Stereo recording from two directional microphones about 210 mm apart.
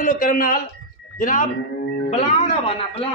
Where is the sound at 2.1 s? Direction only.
25° left (ahead or behind).